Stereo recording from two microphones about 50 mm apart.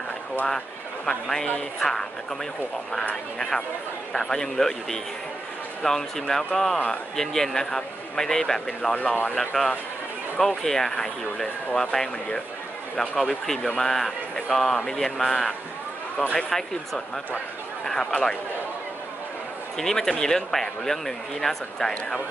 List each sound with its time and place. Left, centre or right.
1.0 s speech: centre
3.3 s speech: centre
8.9 s speech: left
9.3 s speech: centre
13.3 s speech: centre
19.8 s speech: centre